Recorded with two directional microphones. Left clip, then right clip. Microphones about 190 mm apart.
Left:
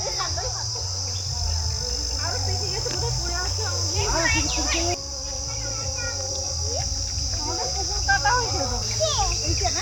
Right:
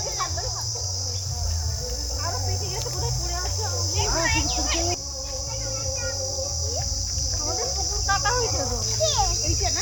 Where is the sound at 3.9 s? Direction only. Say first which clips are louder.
Left 1 dB; 45° left (ahead or behind).